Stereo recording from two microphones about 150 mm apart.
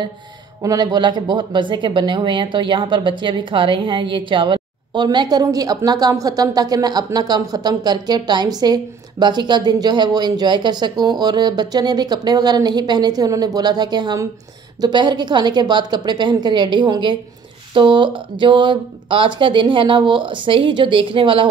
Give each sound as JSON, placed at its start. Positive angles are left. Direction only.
{"t": 0.6, "sound": "speech", "side_deg": -25}